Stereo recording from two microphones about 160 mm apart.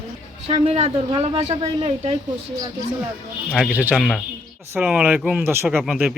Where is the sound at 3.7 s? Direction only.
10° right (ahead or behind).